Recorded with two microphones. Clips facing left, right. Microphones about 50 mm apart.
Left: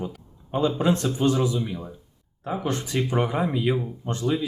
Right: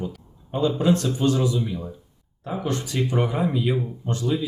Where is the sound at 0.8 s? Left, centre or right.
Left.